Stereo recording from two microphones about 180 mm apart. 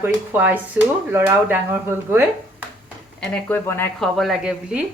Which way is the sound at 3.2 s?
10° left (ahead or behind).